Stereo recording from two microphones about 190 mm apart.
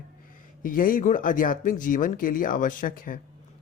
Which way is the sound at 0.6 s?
45° left (ahead or behind).